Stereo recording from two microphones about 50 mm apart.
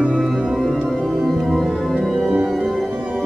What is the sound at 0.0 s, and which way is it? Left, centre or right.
Music, centre.